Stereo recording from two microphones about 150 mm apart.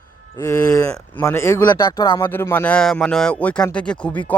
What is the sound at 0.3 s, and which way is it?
Speech, 20° left (ahead or behind).